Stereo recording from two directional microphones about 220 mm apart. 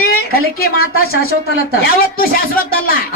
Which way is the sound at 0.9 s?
70° left (ahead or behind).